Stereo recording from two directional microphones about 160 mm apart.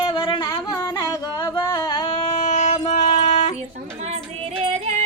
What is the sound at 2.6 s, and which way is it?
Music, 45° left (ahead or behind).